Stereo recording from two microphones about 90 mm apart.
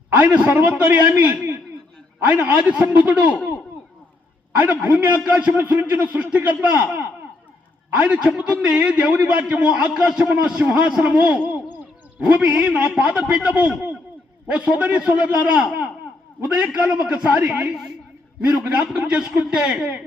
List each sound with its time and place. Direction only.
0.2 s a man's voice: 15° right (ahead or behind)
4.5 s a man's voice: 15° right (ahead or behind)